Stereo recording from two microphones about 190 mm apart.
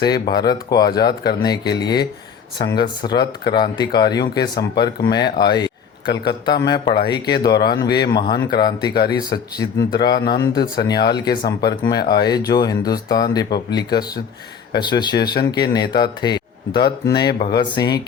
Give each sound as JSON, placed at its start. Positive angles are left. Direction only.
{"t": 0.0, "sound": "speech", "side_deg": 20}